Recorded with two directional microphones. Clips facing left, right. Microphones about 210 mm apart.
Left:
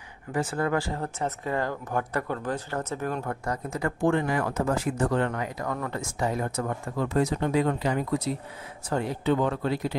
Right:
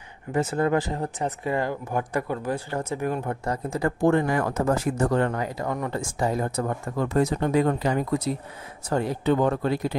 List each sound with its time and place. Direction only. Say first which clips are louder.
0.3 s speech: right 4 dB; 20° right (ahead or behind)
3.4 s speech: right 5 dB; 30° right (ahead or behind)
7.0 s speech: right 2 dB; 45° right (ahead or behind)